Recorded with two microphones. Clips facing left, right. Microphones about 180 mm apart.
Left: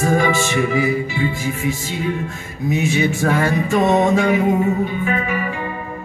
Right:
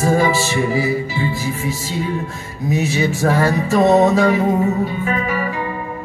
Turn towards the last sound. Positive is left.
turn(degrees=-35)  # may be behind; listen again after turning